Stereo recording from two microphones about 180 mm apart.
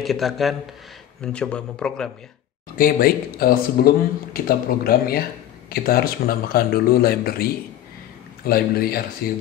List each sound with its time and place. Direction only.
0.0 s a man's voice: centre (ahead or behind)
2.8 s speech: 55° left (ahead or behind)
8.5 s speech: 55° left (ahead or behind)